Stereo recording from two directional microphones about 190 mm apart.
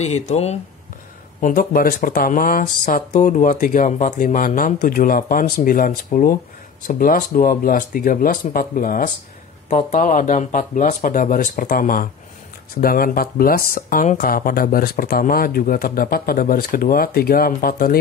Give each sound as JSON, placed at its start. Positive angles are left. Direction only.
{"t": 0.3, "sound": "speech", "side_deg": 35}
{"t": 1.4, "sound": "speech", "side_deg": 45}